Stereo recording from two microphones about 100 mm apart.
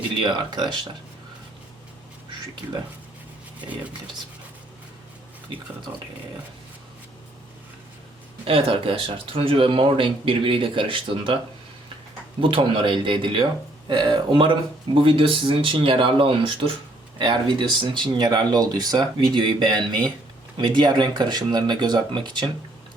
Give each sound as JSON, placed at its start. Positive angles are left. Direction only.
{"t": 0.2, "sound": "speech", "side_deg": -50}
{"t": 8.4, "sound": "speech", "side_deg": -65}
{"t": 12.4, "sound": "speech", "side_deg": -60}
{"t": 19.1, "sound": "speech", "side_deg": -55}